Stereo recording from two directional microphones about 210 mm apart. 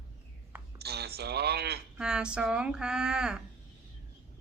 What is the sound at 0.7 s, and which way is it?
Speech, 50° right (ahead or behind).